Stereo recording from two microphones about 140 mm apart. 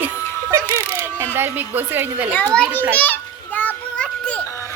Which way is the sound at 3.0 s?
10° left (ahead or behind).